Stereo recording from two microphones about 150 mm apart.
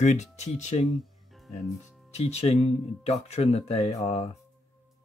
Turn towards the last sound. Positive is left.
turn(degrees=40)  # may be behind; listen again after turning